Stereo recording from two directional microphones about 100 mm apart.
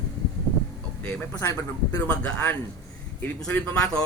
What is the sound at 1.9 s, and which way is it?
A man's voice, 15° left (ahead or behind).